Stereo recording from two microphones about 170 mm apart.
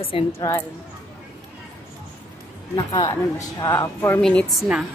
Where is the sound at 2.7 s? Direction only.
25° left (ahead or behind); by 4.6 s 5° left (ahead or behind).